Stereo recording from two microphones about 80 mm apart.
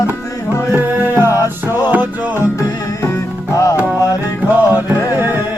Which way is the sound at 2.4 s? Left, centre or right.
Left.